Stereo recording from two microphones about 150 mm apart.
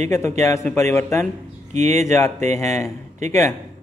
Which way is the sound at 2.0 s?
20° left (ahead or behind).